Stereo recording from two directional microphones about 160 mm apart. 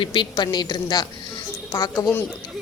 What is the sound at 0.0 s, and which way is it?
Speech, 30° left (ahead or behind).